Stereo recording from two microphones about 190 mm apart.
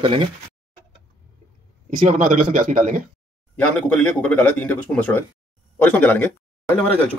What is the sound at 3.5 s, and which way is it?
Speech, 5° left (ahead or behind).